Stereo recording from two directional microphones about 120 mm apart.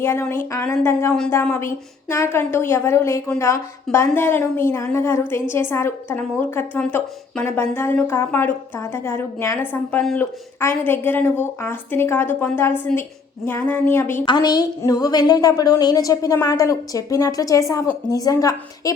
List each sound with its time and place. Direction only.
0.0 s a woman's voice: 20° left (ahead or behind)
9.7 s a woman's voice: 10° left (ahead or behind)
14.3 s a woman's voice: 35° left (ahead or behind)